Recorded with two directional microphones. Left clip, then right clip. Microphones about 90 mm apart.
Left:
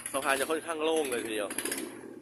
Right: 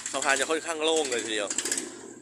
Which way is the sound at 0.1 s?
5° right (ahead or behind).